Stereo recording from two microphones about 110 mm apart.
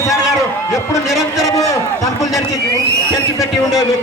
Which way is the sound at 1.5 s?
30° left (ahead or behind).